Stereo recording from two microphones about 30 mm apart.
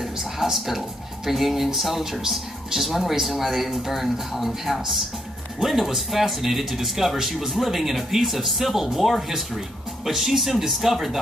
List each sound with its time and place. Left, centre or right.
0.0 s speech: centre